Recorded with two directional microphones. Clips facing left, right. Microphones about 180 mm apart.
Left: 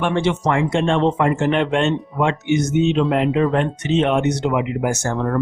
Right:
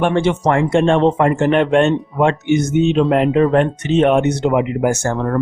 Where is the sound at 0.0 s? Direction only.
50° right (ahead or behind).